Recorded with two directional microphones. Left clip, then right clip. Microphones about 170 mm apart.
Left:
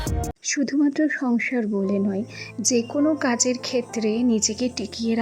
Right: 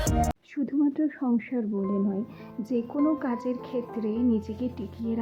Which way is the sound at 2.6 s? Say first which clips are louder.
Left 11 dB; 55° left (ahead or behind).